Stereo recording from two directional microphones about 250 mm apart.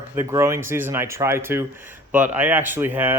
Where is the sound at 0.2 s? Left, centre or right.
Centre.